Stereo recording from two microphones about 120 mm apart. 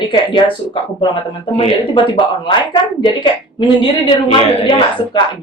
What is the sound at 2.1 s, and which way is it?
A woman's voice, 40° left (ahead or behind).